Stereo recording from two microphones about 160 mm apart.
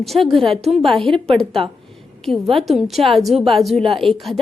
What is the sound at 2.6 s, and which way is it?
A woman's voice, centre (ahead or behind).